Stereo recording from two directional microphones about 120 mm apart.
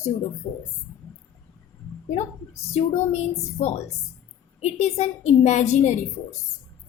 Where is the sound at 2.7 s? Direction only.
65° left (ahead or behind).